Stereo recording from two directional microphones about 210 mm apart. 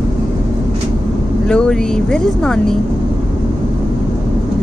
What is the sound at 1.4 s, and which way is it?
Speech, 5° left (ahead or behind).